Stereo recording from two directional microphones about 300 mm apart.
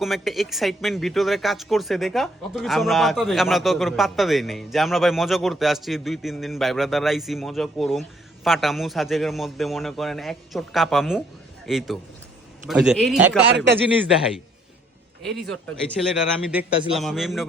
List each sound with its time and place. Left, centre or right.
0.0 s a man's voice: centre
15.6 s speech: centre